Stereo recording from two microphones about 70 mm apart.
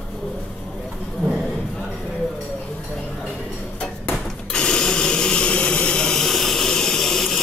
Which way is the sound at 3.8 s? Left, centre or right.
Centre.